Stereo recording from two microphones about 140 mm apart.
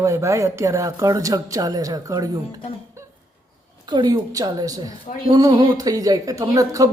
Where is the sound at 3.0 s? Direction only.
20° right (ahead or behind).